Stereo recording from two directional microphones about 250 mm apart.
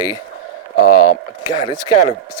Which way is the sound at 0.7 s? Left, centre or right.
Left.